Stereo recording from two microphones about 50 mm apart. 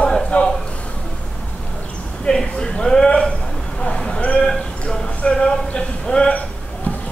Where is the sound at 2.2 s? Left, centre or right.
Centre.